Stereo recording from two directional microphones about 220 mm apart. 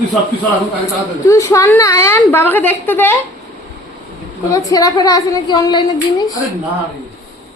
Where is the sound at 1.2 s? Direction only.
15° left (ahead or behind).